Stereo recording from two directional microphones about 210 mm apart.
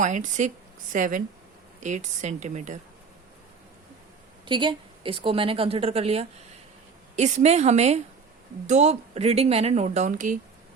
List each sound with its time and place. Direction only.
0.0 s speech: 35° right (ahead or behind)
4.4 s a woman's voice: 25° right (ahead or behind); by 10.3 s 40° right (ahead or behind)